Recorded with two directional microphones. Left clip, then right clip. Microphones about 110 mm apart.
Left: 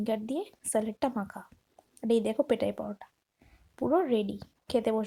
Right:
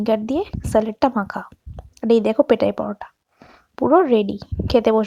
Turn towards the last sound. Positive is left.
turn(degrees=-50)  # may be behind; listen again after turning